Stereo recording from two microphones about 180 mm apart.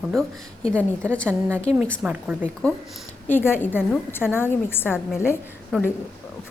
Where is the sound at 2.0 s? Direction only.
5° right (ahead or behind).